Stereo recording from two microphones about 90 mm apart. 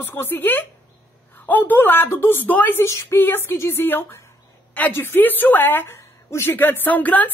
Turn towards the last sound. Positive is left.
turn(degrees=20)  # may be behind; listen again after turning